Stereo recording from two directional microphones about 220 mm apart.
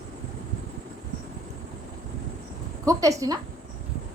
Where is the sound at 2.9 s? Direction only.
15° right (ahead or behind).